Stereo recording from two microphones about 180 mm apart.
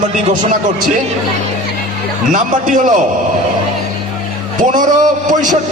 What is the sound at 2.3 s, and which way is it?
Speech, 45° right (ahead or behind).